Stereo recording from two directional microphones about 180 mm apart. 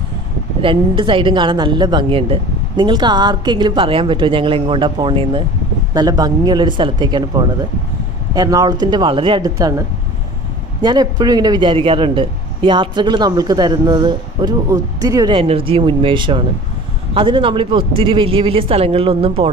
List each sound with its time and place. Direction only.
0.6 s a man's voice: 30° right (ahead or behind)